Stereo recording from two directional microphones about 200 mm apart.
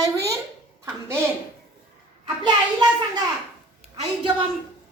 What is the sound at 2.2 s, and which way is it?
Speech, 20° right (ahead or behind).